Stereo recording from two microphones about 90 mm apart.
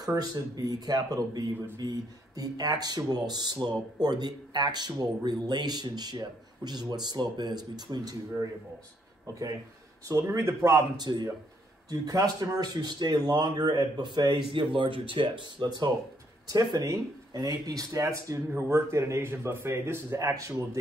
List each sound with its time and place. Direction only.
0.0 s a man's voice: 45° right (ahead or behind)
11.0 s speech: 50° right (ahead or behind); by 15.5 s 70° right (ahead or behind)
15.6 s a man's voice: 50° right (ahead or behind)